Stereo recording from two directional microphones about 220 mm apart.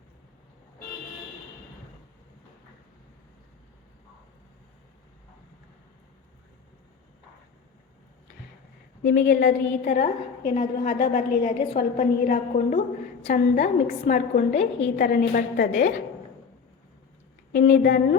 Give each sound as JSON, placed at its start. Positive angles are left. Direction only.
{"t": 9.0, "sound": "a woman's voice", "side_deg": 45}
{"t": 17.5, "sound": "a woman's voice", "side_deg": 40}